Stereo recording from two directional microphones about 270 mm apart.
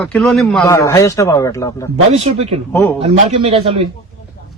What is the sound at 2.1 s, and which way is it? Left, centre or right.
Speech, right.